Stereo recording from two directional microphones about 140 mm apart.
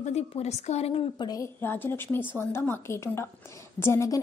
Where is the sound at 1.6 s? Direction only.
15° left (ahead or behind).